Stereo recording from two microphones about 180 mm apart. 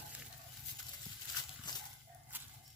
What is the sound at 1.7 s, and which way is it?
Dog, 25° left (ahead or behind).